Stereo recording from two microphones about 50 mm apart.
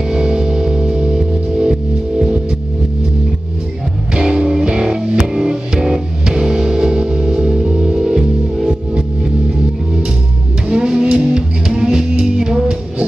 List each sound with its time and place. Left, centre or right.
0.0 s music: centre
4.1 s music: centre
10.7 s music: centre